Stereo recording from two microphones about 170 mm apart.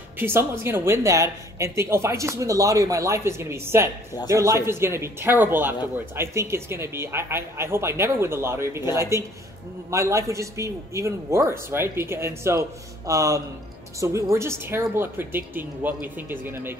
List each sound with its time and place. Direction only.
0.2 s speech: 15° right (ahead or behind)